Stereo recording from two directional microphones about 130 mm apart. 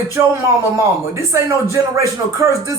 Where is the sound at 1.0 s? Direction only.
20° right (ahead or behind).